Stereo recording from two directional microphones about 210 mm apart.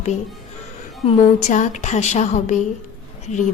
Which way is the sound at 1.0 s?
35° left (ahead or behind).